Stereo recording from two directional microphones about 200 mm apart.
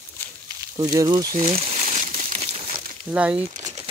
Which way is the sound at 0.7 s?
20° right (ahead or behind).